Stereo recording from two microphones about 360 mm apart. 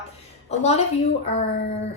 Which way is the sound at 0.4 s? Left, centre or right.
Centre.